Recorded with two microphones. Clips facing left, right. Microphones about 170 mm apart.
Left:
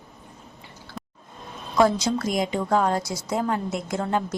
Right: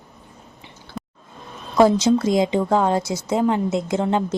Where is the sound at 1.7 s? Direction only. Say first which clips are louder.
Right 5 dB; 25° right (ahead or behind).